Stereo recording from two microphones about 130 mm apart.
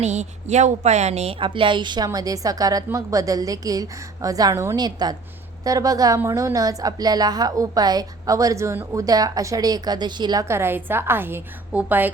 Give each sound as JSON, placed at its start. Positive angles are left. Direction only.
{"t": 0.0, "sound": "a woman's voice", "side_deg": -60}
{"t": 10.5, "sound": "a woman's voice", "side_deg": -15}